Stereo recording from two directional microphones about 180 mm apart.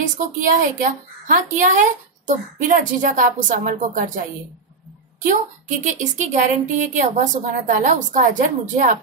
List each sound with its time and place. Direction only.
0.0 s a woman's voice: 50° right (ahead or behind)
5.9 s a woman's voice: 40° right (ahead or behind)